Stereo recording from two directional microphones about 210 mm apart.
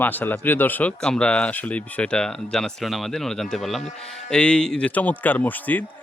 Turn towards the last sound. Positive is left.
turn(degrees=10)  # may be behind; listen again after turning